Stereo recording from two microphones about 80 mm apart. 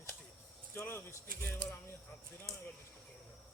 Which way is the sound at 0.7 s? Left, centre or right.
Left.